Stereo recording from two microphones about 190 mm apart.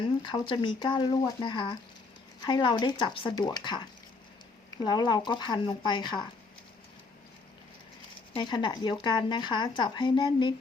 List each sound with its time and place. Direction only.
0.2 s speech: 25° left (ahead or behind)
4.8 s speech: 25° left (ahead or behind)
8.3 s speech: 25° left (ahead or behind)